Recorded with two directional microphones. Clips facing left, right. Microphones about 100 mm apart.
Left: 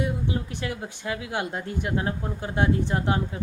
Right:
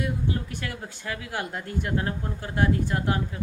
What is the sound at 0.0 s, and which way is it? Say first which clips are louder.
Speech: left 1 dB; 20° left (ahead or behind).